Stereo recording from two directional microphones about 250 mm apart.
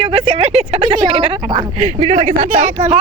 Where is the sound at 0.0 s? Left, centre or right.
Right.